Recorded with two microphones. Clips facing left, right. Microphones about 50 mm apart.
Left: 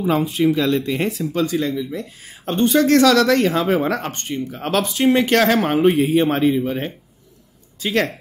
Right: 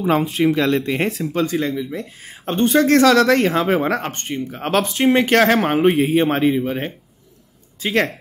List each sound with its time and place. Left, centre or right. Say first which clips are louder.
0.4 s speech: even; right
1.2 s speech: even; right